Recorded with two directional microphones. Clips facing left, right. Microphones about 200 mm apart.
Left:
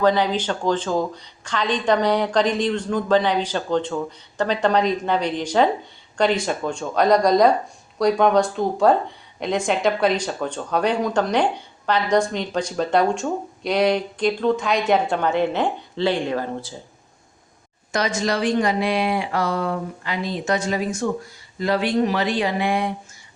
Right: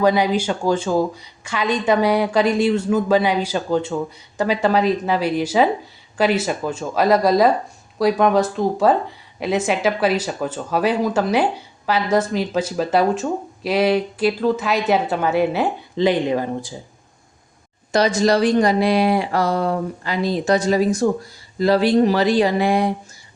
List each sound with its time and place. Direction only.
0.0 s speech: 10° right (ahead or behind)
17.9 s a woman's voice: 35° right (ahead or behind)